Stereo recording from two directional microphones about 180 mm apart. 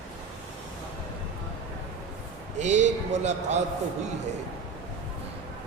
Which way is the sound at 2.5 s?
40° right (ahead or behind).